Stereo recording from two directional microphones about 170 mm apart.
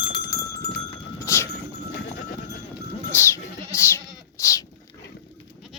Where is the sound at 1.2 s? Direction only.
15° left (ahead or behind).